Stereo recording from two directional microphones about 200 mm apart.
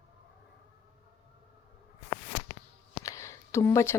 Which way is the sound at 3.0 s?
15° left (ahead or behind).